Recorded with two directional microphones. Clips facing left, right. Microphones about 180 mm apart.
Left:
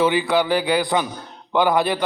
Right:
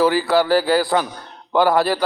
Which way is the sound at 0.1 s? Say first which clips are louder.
Right 3 dB; 20° left (ahead or behind).